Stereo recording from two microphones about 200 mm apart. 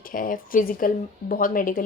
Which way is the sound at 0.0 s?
45° left (ahead or behind).